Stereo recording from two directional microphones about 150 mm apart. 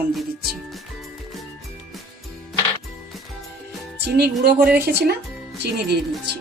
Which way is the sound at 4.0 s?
90° right.